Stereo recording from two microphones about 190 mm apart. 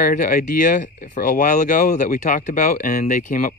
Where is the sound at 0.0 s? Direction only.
45° left (ahead or behind).